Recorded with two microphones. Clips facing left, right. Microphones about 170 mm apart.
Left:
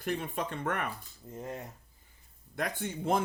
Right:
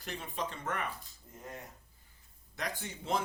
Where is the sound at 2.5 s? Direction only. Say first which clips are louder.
Left 5 dB; 55° left (ahead or behind).